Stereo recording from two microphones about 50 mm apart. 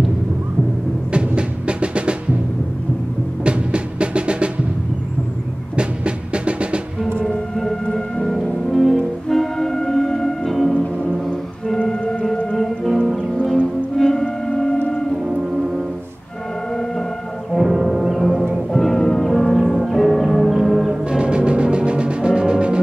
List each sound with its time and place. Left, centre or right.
1.1 s music: right
3.4 s music: right
5.8 s music: right
7.2 s music: centre
12.8 s music: centre
13.9 s music: centre
15.2 s music: centre
17.5 s music: centre
20.9 s music: centre